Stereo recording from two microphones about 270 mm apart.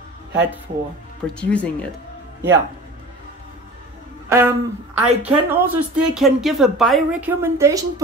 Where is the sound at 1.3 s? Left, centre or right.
Centre.